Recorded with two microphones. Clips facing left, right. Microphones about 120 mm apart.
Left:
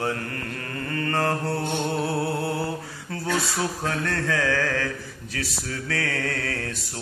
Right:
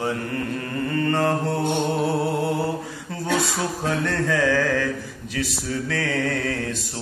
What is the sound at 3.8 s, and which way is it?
Mantra, 20° right (ahead or behind).